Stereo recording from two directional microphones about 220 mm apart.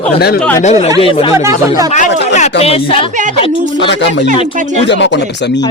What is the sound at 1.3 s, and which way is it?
Speech, 15° right (ahead or behind).